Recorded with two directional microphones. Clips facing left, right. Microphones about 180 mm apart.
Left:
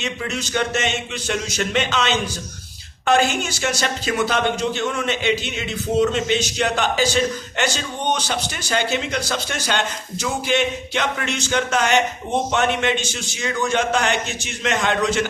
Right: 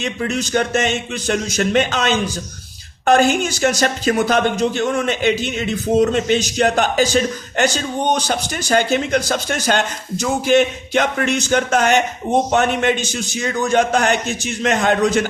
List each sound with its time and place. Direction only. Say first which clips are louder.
0.0 s speech: right 5 dB; 40° right (ahead or behind)